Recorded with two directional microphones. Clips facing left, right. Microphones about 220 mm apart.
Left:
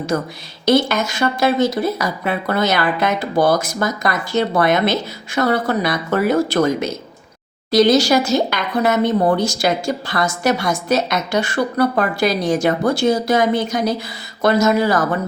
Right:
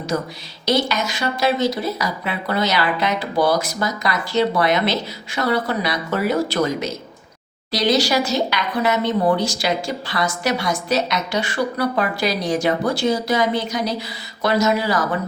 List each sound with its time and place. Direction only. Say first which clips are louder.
0.1 s speech: left 1 dB; 50° left (ahead or behind)